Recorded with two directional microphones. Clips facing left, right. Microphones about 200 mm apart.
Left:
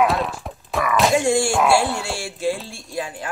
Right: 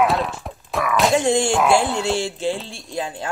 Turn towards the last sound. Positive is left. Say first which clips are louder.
# right 1 dB
turn(degrees=-25)  # may be behind; listen again after turning